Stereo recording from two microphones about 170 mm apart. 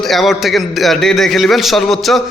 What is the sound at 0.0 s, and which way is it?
A man's voice, centre (ahead or behind).